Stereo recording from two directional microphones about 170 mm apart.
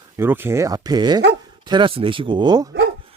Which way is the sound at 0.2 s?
15° right (ahead or behind).